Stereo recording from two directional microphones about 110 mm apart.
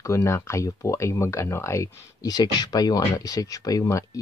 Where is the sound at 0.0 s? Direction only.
25° left (ahead or behind).